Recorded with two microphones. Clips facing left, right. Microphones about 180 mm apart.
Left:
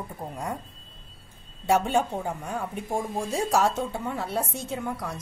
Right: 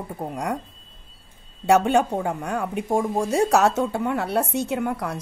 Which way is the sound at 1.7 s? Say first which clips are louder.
Right 5 dB; 75° right (ahead or behind).